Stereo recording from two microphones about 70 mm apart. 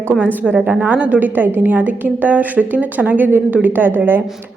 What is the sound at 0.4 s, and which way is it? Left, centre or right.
A woman's voice, centre.